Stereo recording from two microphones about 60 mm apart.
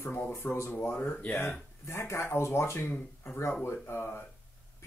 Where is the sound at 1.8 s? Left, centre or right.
Left.